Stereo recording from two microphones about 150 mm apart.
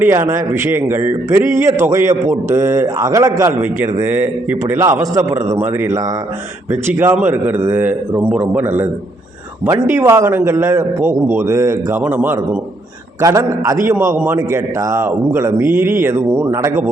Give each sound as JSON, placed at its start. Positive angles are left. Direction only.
{"t": 0.0, "sound": "a man's voice", "side_deg": -15}